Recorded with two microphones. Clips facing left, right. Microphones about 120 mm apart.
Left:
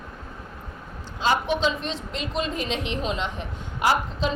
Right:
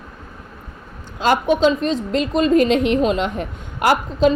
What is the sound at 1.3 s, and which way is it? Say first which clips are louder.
A woman's voice: right 7 dB; 45° right (ahead or behind).